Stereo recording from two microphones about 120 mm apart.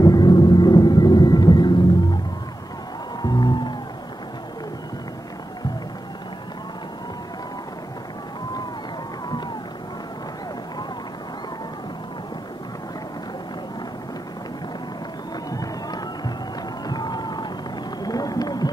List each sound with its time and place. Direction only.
0.0 s music: 35° left (ahead or behind)
3.2 s music: 35° left (ahead or behind)
15.5 s music: 30° left (ahead or behind)
16.8 s a sound: 35° left (ahead or behind)